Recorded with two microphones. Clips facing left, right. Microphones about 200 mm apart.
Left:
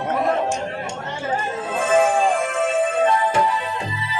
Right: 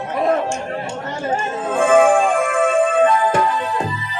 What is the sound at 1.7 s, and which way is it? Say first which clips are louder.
Music: right 5 dB; 50° right (ahead or behind).